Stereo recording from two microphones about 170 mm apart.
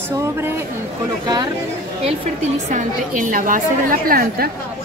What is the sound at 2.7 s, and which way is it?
A woman's voice, 50° right (ahead or behind).